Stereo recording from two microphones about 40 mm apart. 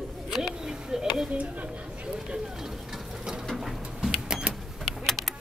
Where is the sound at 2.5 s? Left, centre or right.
Centre.